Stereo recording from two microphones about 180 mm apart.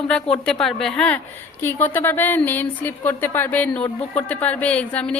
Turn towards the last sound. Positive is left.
turn(degrees=5)  # may be behind; listen again after turning